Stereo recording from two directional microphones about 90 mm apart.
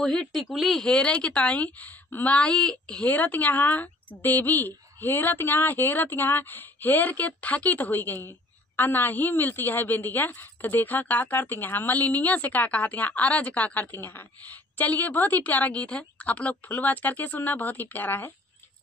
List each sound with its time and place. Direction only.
0.0 s speech: 5° left (ahead or behind); by 18.3 s 20° left (ahead or behind)